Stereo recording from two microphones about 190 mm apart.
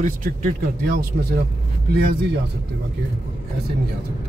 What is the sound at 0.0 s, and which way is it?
Speech, 45° right (ahead or behind).